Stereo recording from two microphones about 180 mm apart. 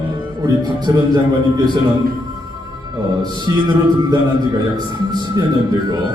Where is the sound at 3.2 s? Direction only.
25° right (ahead or behind).